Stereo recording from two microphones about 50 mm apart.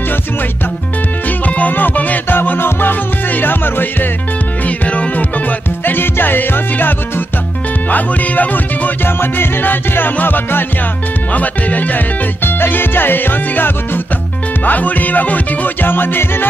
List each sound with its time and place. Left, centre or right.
1.6 s music: left
4.6 s music: left
5.9 s music: left
12.4 s music: left